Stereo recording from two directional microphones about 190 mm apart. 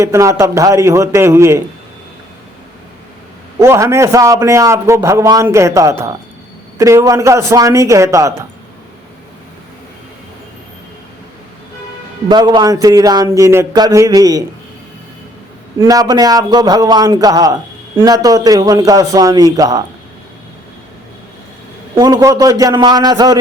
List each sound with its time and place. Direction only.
0.0 s a man's voice: 15° right (ahead or behind)
3.6 s a man's voice: 15° right (ahead or behind)
12.3 s a man's voice: 20° right (ahead or behind)
15.8 s a man's voice: 20° right (ahead or behind)
21.9 s a man's voice: 15° right (ahead or behind)